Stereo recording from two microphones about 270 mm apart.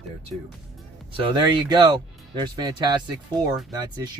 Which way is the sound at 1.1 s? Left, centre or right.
Centre.